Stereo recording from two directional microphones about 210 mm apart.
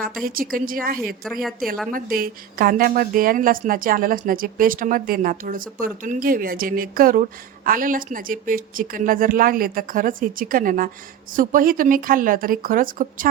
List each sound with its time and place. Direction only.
0.3 s a woman's voice: 45° right (ahead or behind)
1.2 s a woman's voice: centre (ahead or behind)
1.9 s a woman's voice: 45° right (ahead or behind)